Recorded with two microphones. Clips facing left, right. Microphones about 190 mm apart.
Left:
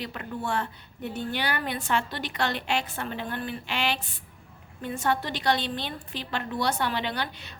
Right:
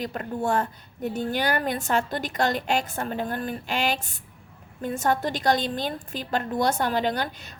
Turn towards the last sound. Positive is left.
turn(degrees=-45)  # may be behind; listen again after turning